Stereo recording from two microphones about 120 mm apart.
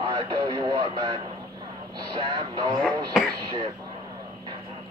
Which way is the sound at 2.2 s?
40° right (ahead or behind).